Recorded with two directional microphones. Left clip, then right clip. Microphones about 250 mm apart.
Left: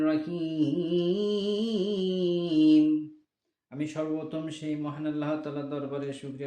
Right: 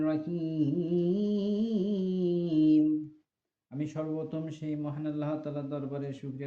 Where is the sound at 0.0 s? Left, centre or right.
Centre.